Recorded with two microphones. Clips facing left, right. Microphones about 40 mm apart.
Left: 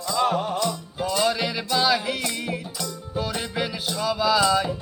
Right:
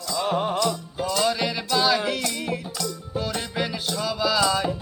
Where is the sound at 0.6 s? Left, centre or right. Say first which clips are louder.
Right 1 dB; centre.